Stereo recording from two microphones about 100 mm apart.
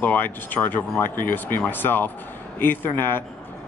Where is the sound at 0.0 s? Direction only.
15° left (ahead or behind).